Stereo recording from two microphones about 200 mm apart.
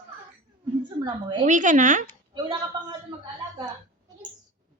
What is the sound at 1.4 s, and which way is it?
Speech, 40° right (ahead or behind).